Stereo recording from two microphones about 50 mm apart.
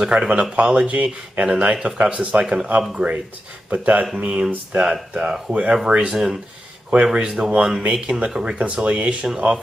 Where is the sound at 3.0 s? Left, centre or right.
Right.